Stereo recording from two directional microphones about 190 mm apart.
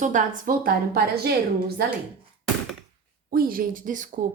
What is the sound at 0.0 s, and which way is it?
Speech, 45° right (ahead or behind).